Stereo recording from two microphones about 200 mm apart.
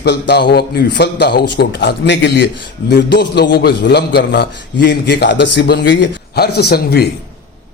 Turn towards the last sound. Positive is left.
turn(degrees=50)  # may be behind; listen again after turning